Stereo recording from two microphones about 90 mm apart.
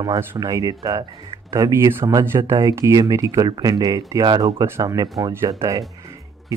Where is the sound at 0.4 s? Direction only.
40° right (ahead or behind).